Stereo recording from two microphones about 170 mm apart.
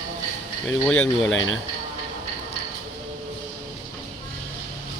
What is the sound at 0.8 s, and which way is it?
Speech, 5° left (ahead or behind).